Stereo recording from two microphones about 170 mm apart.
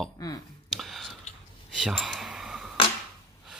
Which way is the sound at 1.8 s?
5° right (ahead or behind).